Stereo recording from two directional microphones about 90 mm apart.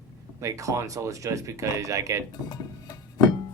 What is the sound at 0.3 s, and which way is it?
Speech, 35° right (ahead or behind).